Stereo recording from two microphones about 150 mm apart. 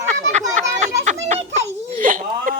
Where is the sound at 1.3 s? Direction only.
45° right (ahead or behind).